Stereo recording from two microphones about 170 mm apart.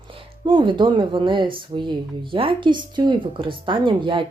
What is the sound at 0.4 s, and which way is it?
Speech, 25° right (ahead or behind).